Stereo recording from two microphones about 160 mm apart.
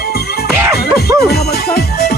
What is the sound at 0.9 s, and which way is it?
Speech, 80° left.